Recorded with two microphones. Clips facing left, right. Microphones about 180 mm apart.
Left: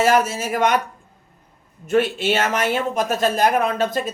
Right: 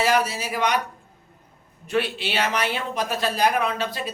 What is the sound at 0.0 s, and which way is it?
Speech, 50° left (ahead or behind).